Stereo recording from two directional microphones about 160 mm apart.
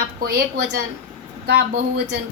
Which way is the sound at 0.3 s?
90° right.